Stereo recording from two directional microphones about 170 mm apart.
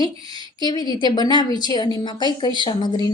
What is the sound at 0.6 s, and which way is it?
A woman's voice, 25° left (ahead or behind).